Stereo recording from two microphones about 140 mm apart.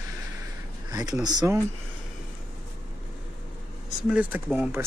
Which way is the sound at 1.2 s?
30° right (ahead or behind).